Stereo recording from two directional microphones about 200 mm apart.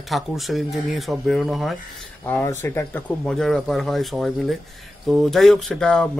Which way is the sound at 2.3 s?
10° left (ahead or behind).